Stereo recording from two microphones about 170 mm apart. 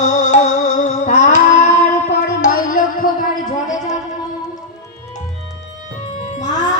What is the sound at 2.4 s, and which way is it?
Music, 50° left (ahead or behind).